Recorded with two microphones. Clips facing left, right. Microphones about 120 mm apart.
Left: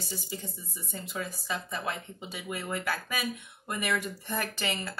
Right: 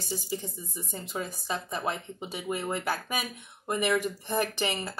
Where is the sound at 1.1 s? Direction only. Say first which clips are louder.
Right 2 dB; 25° right (ahead or behind).